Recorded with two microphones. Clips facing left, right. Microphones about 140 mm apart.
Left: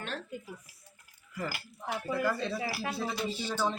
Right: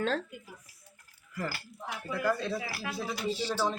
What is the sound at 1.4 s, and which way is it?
Speech, 10° left (ahead or behind).